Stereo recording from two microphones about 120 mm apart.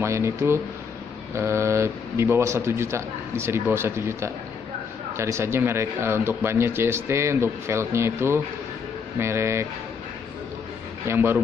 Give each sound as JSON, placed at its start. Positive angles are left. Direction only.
{"t": 0.0, "sound": "speech", "side_deg": -25}
{"t": 11.1, "sound": "speech", "side_deg": -15}